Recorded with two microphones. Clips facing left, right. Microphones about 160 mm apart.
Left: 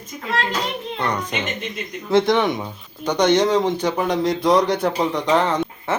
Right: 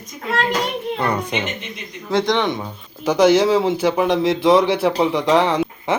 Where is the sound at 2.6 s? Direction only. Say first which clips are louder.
Even; 5° right (ahead or behind).